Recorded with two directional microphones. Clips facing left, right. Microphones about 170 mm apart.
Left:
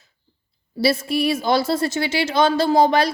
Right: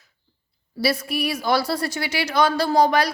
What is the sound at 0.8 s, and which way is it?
A woman's voice, 25° left (ahead or behind).